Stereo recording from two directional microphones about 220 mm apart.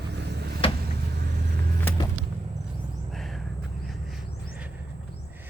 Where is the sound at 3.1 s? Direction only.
Centre (ahead or behind).